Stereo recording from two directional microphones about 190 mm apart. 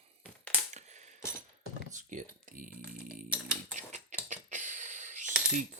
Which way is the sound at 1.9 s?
40° right (ahead or behind).